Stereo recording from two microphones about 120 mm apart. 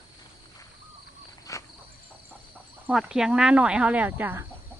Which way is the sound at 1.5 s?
25° left (ahead or behind).